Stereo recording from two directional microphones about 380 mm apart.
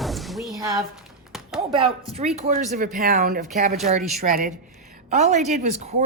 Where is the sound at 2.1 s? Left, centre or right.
Centre.